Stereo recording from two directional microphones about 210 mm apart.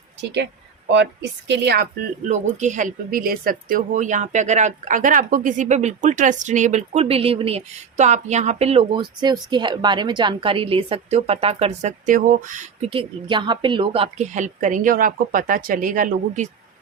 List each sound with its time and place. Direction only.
0.9 s a woman's voice: 55° right (ahead or behind)
2.2 s speech: 35° right (ahead or behind)